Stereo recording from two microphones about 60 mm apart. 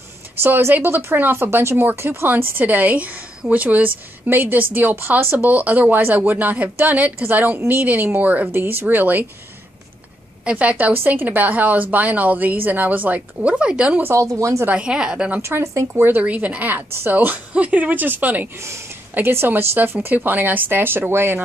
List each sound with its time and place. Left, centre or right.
0.4 s speech: right
1.9 s a woman's voice: right
10.4 s a woman's voice: right
14.1 s speech: right
14.7 s a woman's voice: centre
15.4 s speech: right
15.9 s speech: right
16.2 s a woman's voice: right
18.6 s speech: right
19.1 s speech: right